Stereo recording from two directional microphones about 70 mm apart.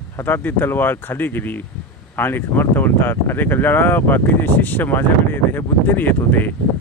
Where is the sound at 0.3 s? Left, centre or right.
Left.